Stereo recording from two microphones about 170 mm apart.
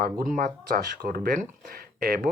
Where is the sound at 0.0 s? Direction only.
55° right (ahead or behind).